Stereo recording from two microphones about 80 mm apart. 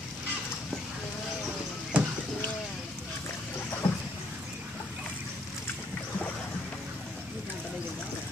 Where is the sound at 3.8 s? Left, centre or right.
Left.